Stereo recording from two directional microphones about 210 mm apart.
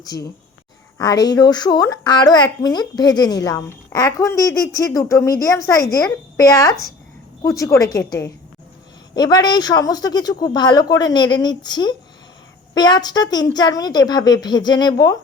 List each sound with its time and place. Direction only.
0.0 s a woman's voice: 15° left (ahead or behind)